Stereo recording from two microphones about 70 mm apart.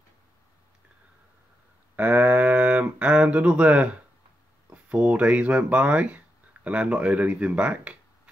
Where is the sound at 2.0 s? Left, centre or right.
Right.